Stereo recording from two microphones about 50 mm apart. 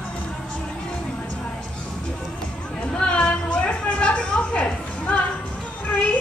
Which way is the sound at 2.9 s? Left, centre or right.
Centre.